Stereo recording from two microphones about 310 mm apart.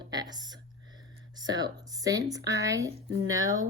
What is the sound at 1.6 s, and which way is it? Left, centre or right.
A woman's voice, centre.